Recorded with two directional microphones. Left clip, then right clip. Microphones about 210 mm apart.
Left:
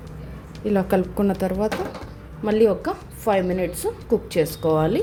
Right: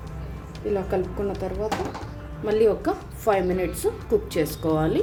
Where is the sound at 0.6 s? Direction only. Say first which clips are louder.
Left 4 dB; 35° left (ahead or behind).